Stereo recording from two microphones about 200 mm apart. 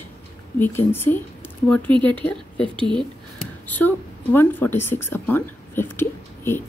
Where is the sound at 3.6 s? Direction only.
10° left (ahead or behind).